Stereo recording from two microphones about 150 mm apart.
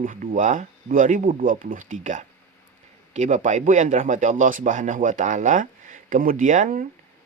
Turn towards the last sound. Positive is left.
turn(degrees=-60)  # may be behind; listen again after turning